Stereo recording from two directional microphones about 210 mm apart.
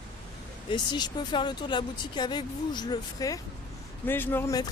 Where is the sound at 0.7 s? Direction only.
20° left (ahead or behind).